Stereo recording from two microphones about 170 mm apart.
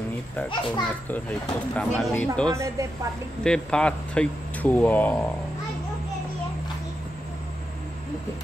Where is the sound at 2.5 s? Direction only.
15° right (ahead or behind).